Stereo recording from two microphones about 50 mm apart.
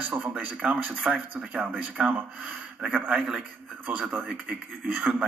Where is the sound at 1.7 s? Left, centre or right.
Right.